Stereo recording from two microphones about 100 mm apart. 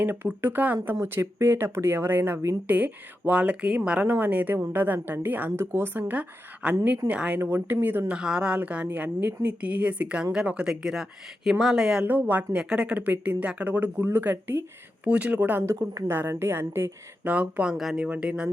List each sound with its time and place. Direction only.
0.0 s speech: 20° right (ahead or behind)
15.6 s speech: 30° right (ahead or behind)
17.3 s speech: 10° right (ahead or behind)